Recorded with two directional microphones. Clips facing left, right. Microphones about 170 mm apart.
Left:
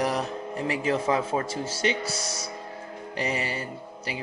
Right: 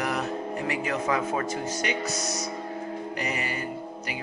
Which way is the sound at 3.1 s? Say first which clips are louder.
Left 5 dB; 30° left (ahead or behind).